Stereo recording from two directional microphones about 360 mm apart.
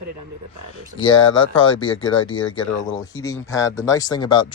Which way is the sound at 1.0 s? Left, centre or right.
Centre.